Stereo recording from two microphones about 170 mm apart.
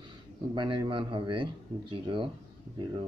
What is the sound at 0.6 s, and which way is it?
Speech, 30° right (ahead or behind).